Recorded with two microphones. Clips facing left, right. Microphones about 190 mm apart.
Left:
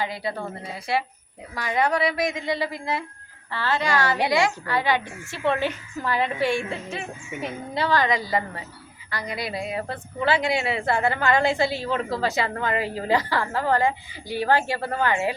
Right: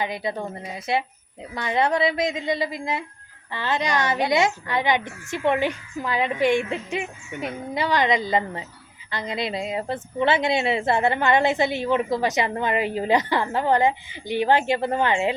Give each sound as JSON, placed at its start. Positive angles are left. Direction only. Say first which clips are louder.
{"t": 0.0, "sound": "a woman's voice", "louder": "right 1 dB", "side_deg": -20}